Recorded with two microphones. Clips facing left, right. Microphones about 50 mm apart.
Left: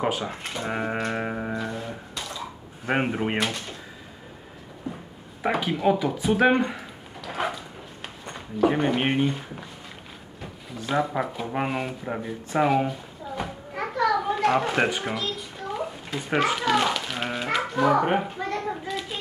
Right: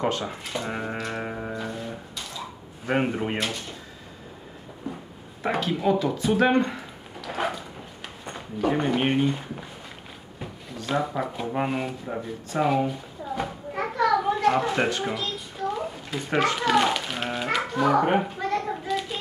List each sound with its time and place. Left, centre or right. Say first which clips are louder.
0.0 s music: even; centre
5.4 s music: left 1 dB; centre
5.8 s speech: even; centre
8.5 s music: left 2 dB; centre
11.0 s speech: left 2 dB; centre
11.5 s music: even; centre
13.4 s children playing: right 1 dB; centre
14.8 s music: left 1 dB; centre
15.1 s a sound: even; centre